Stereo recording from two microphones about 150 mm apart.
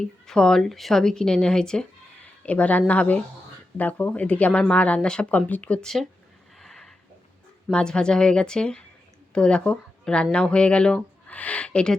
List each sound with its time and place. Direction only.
0.0 s speech: 5° left (ahead or behind)
6.6 s a sound: centre (ahead or behind)
7.7 s a woman's voice: 5° left (ahead or behind)